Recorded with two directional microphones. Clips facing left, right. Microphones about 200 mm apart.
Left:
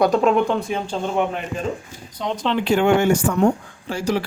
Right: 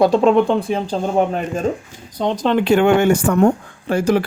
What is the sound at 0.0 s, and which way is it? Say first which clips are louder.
Speech: right 4 dB; 30° right (ahead or behind).